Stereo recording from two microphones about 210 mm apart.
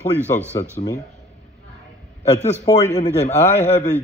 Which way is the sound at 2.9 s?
30° left (ahead or behind).